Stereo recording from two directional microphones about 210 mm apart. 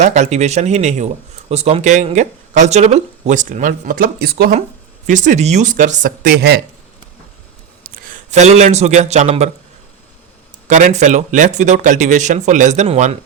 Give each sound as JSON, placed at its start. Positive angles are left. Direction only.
{"t": 0.0, "sound": "speech", "side_deg": -35}
{"t": 5.0, "sound": "speech", "side_deg": -35}
{"t": 7.9, "sound": "a man's voice", "side_deg": -40}
{"t": 10.7, "sound": "speech", "side_deg": -35}